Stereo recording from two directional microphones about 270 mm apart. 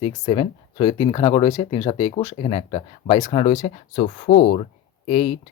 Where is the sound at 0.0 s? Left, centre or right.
Centre.